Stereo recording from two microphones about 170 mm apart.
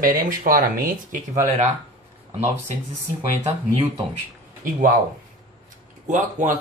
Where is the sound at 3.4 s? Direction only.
25° right (ahead or behind).